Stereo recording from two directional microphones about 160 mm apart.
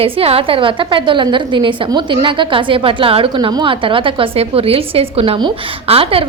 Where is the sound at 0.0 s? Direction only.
35° right (ahead or behind).